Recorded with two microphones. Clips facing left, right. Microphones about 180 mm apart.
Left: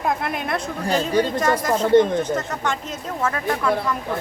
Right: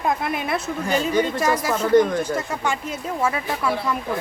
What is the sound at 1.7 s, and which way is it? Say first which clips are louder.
Speech: left 1 dB; 25° left (ahead or behind).